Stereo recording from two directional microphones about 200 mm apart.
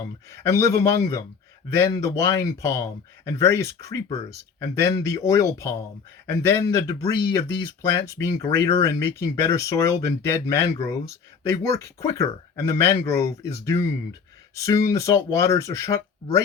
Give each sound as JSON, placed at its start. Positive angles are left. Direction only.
{"t": 0.0, "sound": "speech", "side_deg": 15}